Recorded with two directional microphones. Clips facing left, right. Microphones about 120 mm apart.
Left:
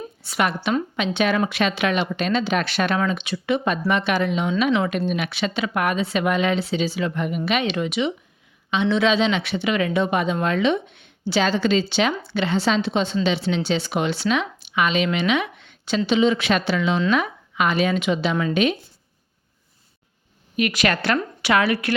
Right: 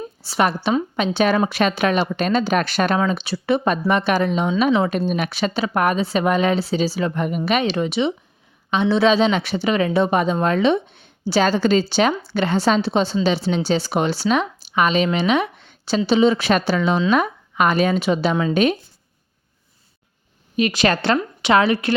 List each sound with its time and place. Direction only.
0.2 s a woman's voice: 35° right (ahead or behind)
20.6 s speech: 30° right (ahead or behind)